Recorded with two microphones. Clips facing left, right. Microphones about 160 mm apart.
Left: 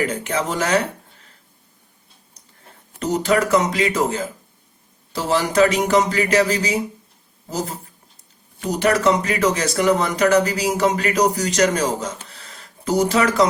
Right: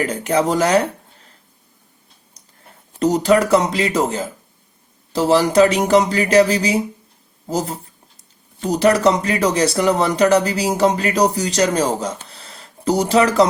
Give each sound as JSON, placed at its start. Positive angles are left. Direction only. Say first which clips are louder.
{"t": 0.0, "sound": "speech", "louder": "right 4 dB", "side_deg": -35}
{"t": 3.0, "sound": "speech", "louder": "right 4 dB", "side_deg": -35}